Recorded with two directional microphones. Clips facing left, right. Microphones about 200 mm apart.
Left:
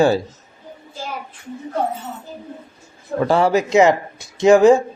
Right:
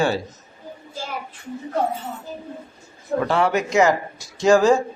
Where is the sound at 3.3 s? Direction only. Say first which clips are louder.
Left 6 dB; 30° left (ahead or behind).